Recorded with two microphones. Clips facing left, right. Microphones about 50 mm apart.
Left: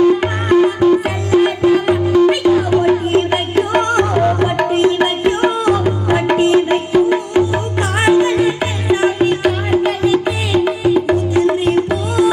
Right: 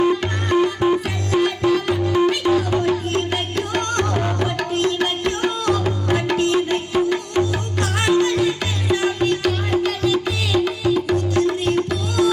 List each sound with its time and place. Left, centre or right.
0.2 s music: left